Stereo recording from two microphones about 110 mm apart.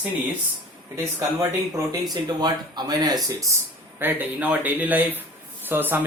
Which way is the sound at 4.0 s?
20° right (ahead or behind).